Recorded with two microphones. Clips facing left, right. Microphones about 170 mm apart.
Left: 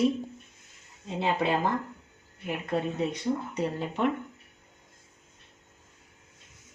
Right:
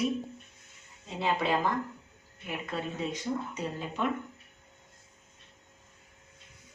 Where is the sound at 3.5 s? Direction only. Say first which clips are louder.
Left 5 dB; 60° left (ahead or behind).